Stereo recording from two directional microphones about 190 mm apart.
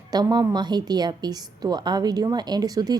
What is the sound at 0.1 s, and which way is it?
A woman's voice, 20° right (ahead or behind).